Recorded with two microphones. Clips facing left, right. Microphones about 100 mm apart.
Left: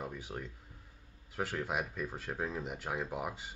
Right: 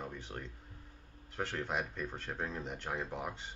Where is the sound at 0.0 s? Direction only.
5° left (ahead or behind).